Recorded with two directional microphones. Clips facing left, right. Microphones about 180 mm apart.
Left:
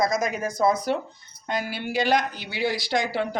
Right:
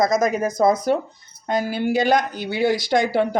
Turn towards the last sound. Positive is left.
turn(degrees=-50)  # may be behind; listen again after turning